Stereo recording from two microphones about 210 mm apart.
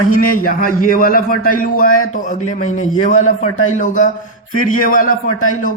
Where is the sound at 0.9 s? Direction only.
45° left (ahead or behind).